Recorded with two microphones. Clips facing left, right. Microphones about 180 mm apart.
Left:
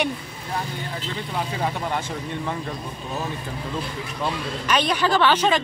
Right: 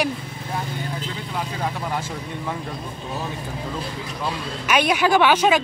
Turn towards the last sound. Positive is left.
turn(degrees=-10)  # may be behind; listen again after turning